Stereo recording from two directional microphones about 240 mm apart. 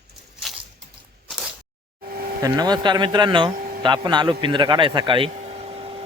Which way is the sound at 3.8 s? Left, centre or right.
Centre.